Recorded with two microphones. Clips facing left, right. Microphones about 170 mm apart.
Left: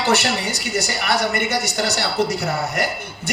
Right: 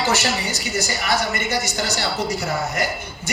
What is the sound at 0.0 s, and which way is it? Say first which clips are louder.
Speech: left 2 dB; 60° left (ahead or behind).